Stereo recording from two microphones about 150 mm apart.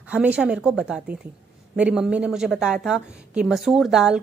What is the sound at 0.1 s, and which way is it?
A woman's voice, 10° right (ahead or behind).